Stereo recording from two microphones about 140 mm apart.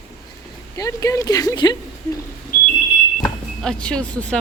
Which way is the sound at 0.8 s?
25° left (ahead or behind).